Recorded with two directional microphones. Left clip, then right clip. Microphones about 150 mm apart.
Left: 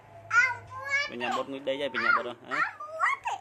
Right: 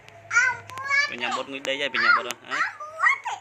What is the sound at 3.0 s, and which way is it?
Baby laughter, 90° left.